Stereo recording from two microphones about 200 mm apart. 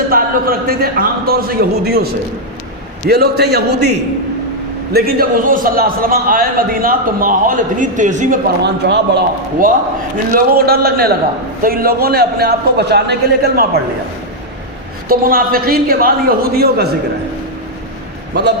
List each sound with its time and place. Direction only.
0.1 s a man's voice: 50° right (ahead or behind)
15.1 s a man's voice: 45° right (ahead or behind)